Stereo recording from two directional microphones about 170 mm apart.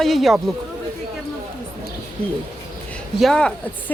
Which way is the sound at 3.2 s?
5° left (ahead or behind).